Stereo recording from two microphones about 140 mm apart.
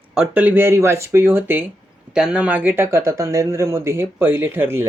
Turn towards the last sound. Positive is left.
turn(degrees=-15)  # may be behind; listen again after turning